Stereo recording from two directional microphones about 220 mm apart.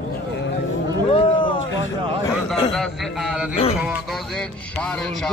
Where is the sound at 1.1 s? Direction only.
25° left (ahead or behind).